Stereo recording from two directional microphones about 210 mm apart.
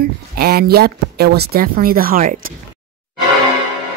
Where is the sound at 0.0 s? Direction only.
45° right (ahead or behind).